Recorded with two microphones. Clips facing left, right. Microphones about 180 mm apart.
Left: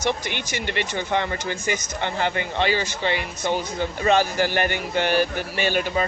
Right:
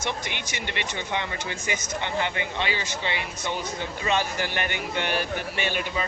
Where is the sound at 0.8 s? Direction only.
40° left (ahead or behind).